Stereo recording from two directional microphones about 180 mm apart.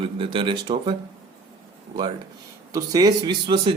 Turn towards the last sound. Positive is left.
turn(degrees=-25)  # may be behind; listen again after turning